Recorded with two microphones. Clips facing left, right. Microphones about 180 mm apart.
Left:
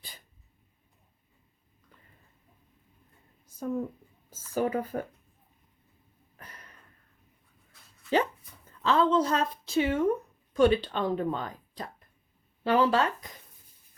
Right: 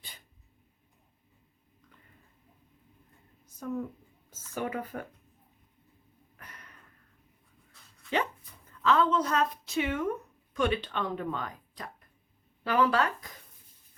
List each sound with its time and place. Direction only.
3.6 s speech: 30° left (ahead or behind)
6.3 s a sound: 30° left (ahead or behind)
8.8 s a woman's voice: 30° left (ahead or behind)